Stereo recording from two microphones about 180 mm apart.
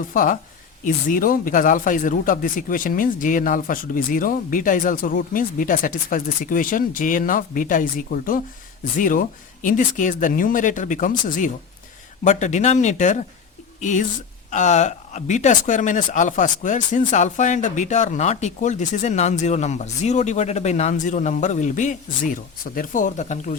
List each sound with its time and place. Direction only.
0.1 s speech: 45° left (ahead or behind)